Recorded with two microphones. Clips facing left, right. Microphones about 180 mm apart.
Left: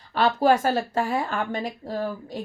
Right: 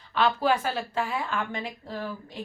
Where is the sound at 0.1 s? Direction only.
40° left (ahead or behind).